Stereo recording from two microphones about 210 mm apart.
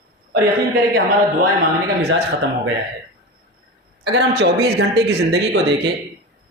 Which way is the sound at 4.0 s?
55° right (ahead or behind).